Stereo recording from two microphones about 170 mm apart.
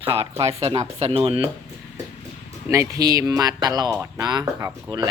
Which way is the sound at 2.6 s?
20° right (ahead or behind).